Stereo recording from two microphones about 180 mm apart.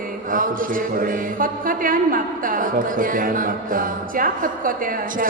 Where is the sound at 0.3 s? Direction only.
50° right (ahead or behind).